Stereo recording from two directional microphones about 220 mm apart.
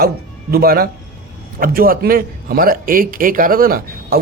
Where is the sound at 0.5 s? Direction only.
45° right (ahead or behind).